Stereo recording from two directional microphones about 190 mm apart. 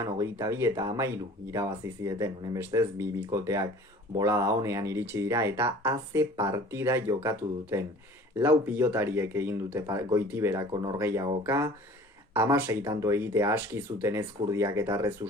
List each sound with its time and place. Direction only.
0.0 s speech: 15° right (ahead or behind)